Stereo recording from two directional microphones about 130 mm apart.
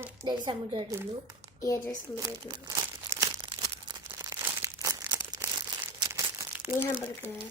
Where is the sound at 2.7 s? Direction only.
25° right (ahead or behind).